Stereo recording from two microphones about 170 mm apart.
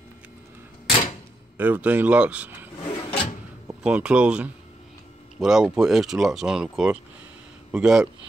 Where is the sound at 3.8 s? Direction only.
5° right (ahead or behind).